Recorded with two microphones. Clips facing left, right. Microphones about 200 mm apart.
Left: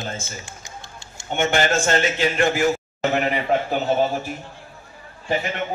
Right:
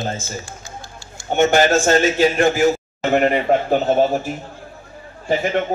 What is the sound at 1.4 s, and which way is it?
Speech, 45° right (ahead or behind).